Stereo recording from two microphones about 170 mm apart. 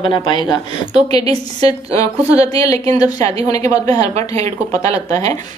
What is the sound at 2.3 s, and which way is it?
Speech, 20° left (ahead or behind).